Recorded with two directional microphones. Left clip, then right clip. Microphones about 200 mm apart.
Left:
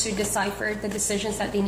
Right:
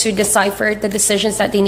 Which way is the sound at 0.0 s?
50° right (ahead or behind).